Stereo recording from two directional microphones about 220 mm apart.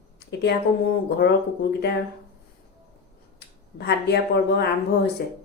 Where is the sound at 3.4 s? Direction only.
50° left (ahead or behind).